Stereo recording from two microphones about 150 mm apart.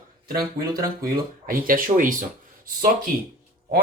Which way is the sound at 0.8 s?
70° right (ahead or behind).